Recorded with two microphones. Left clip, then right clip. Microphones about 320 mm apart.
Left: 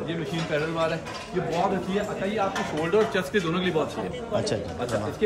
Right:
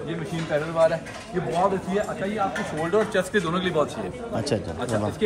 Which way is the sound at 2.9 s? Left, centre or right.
Centre.